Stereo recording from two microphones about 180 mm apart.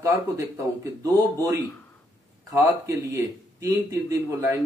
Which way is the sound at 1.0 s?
20° right (ahead or behind).